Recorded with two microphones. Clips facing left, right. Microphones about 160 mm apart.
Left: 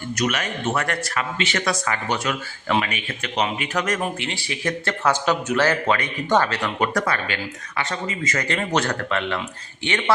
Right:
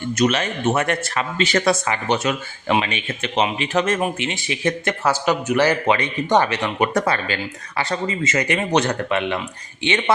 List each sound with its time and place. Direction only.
0.1 s speech: 25° right (ahead or behind)
5.0 s a man's voice: 10° right (ahead or behind)